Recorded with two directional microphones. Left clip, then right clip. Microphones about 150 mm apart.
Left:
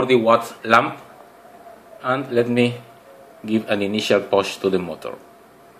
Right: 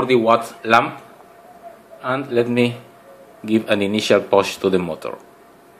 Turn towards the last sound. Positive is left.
turn(degrees=-20)  # may be behind; listen again after turning